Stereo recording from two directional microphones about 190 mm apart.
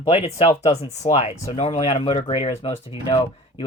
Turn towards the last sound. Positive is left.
turn(degrees=30)  # may be behind; listen again after turning